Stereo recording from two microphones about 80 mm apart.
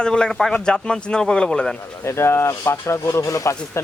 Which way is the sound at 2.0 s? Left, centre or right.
Left.